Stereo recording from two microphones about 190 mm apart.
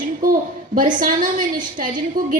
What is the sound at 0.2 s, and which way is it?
A woman's voice, 45° right (ahead or behind).